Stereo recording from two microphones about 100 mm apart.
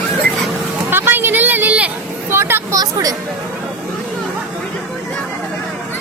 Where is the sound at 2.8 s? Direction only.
40° right (ahead or behind).